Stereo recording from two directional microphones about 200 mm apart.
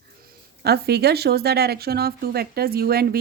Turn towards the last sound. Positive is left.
turn(degrees=-50)  # may be behind; listen again after turning